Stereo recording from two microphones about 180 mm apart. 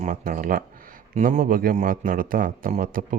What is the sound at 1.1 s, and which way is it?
Speech, 40° right (ahead or behind).